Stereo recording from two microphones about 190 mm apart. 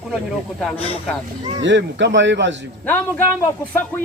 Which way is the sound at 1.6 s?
70° right (ahead or behind).